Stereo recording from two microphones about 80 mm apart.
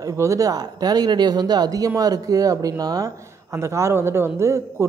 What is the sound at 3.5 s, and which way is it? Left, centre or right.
A woman's voice, right.